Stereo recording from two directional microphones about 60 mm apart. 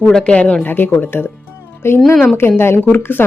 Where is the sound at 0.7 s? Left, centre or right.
Left.